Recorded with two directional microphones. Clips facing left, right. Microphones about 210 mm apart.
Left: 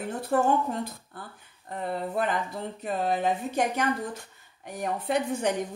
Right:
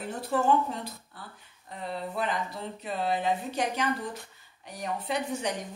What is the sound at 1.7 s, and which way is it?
A woman's voice, 50° left (ahead or behind).